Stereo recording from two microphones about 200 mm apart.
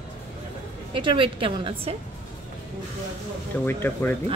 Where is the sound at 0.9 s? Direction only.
25° right (ahead or behind).